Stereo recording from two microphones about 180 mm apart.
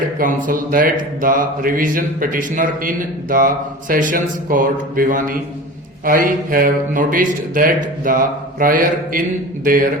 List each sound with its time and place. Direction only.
0.2 s speech: 50° right (ahead or behind)